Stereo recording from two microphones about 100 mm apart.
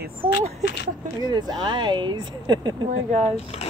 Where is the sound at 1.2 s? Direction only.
45° right (ahead or behind).